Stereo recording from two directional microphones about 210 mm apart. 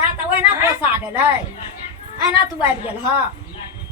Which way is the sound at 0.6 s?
10° right (ahead or behind).